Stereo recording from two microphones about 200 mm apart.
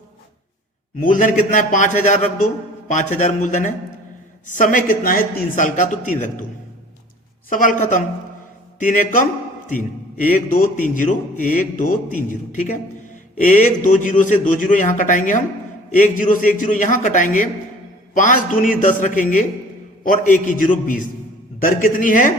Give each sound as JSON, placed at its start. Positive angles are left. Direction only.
{"t": 0.9, "sound": "a man's voice", "side_deg": 40}
{"t": 7.5, "sound": "a man's voice", "side_deg": 40}